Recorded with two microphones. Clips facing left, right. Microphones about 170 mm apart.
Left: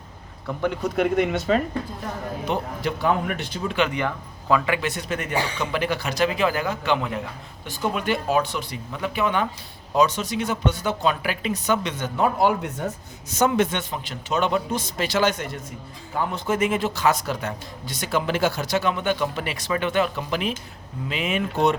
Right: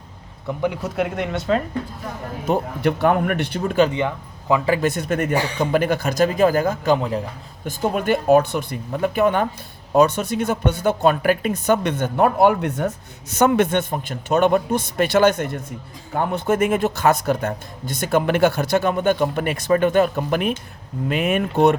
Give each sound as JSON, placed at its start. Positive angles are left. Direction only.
{"t": 0.4, "sound": "a man's voice", "side_deg": -10}
{"t": 0.9, "sound": "speech", "side_deg": 0}
{"t": 2.5, "sound": "speech", "side_deg": -45}
{"t": 2.8, "sound": "speech", "side_deg": -60}
{"t": 3.8, "sound": "speech", "side_deg": -20}
{"t": 4.6, "sound": "speech", "side_deg": -40}
{"t": 7.6, "sound": "speech", "side_deg": -45}